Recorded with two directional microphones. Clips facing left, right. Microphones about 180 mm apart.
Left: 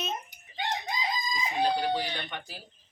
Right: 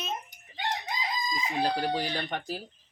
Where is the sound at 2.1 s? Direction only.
40° right (ahead or behind).